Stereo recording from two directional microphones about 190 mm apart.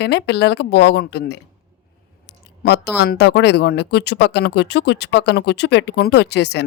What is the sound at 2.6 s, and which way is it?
Speech, 60° left (ahead or behind).